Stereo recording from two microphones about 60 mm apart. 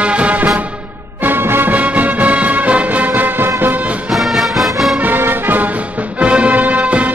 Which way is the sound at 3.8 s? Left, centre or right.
Right.